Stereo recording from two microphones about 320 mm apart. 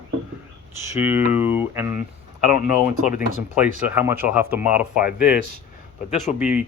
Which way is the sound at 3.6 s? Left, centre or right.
Centre.